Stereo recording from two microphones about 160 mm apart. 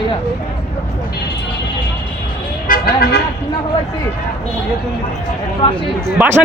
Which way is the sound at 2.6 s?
65° left (ahead or behind).